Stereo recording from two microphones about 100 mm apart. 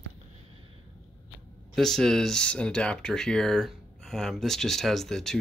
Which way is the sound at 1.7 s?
5° left (ahead or behind).